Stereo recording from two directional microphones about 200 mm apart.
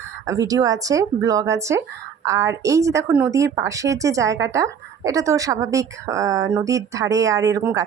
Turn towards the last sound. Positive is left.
turn(degrees=-15)  # may be behind; listen again after turning